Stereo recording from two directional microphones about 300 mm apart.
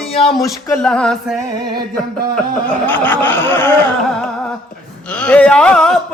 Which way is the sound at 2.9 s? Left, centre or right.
Centre.